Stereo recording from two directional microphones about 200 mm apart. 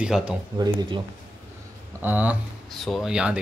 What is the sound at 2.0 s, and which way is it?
Speech, 5° right (ahead or behind).